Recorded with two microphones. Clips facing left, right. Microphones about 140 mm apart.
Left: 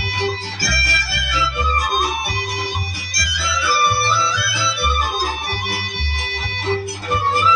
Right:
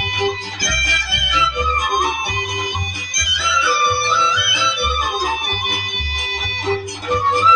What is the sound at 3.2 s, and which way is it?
Music, 20° right (ahead or behind).